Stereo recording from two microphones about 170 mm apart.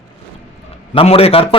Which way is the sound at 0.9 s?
35° left (ahead or behind).